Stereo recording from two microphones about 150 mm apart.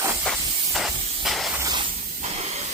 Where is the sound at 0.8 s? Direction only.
Centre (ahead or behind).